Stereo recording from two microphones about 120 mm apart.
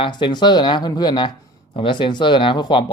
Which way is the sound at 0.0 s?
40° left (ahead or behind).